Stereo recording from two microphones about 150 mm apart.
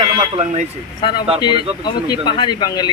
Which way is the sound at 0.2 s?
40° right (ahead or behind).